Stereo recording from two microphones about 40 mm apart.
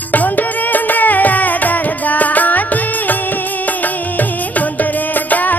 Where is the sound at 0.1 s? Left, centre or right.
Left.